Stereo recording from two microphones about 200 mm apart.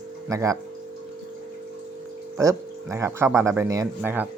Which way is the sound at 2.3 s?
15° right (ahead or behind).